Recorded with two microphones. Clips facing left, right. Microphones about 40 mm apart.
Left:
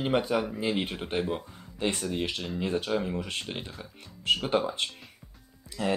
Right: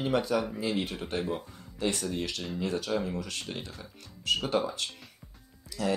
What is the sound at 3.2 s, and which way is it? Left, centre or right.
Speech, left.